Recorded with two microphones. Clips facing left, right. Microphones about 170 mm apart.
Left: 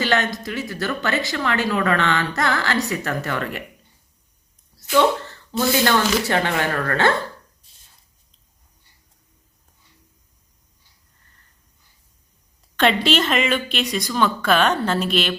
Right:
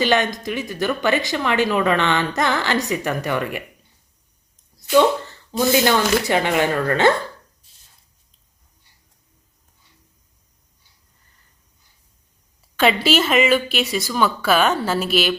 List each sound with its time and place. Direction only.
0.0 s speech: 15° right (ahead or behind)
5.5 s speech: 15° right (ahead or behind)
12.7 s speech: 5° right (ahead or behind)